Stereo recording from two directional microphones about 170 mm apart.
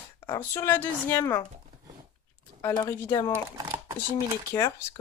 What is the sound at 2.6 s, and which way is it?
Speech, 15° left (ahead or behind).